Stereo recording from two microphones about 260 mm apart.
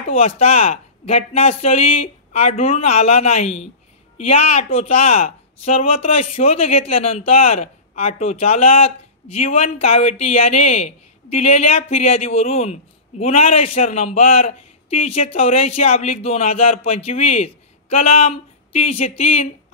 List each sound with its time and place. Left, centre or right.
0.1 s speech: left